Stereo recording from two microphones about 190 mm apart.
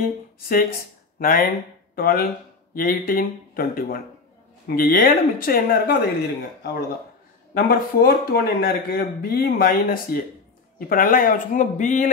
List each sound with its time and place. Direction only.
0.4 s speech: 50° left (ahead or behind)
2.0 s speech: 50° left (ahead or behind)